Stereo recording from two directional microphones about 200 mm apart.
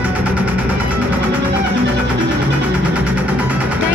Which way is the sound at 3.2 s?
5° right (ahead or behind).